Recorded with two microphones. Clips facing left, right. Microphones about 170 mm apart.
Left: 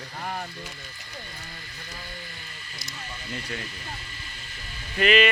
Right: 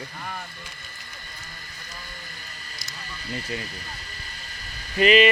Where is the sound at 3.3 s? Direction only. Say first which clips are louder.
Right 3 dB; 35° right (ahead or behind).